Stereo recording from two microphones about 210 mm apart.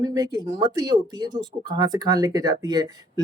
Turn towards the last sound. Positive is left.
turn(degrees=-15)  # may be behind; listen again after turning